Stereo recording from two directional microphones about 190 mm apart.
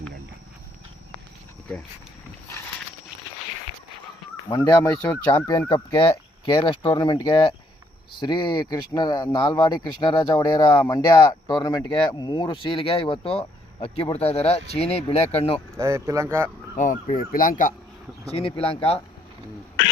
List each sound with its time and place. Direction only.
4.4 s speech: 20° left (ahead or behind)
15.8 s speech: 15° right (ahead or behind)
16.7 s speech: 40° left (ahead or behind)
18.3 s speech: 30° left (ahead or behind)